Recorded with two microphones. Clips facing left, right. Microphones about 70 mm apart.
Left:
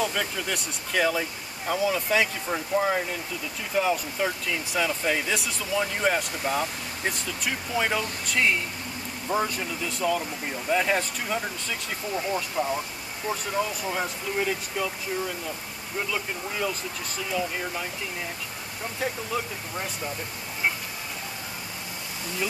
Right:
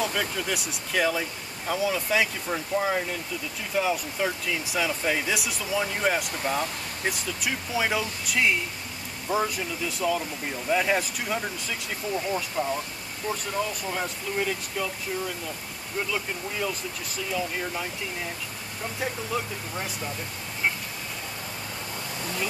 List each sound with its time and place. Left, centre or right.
0.0 s speech: centre
18.9 s speech: centre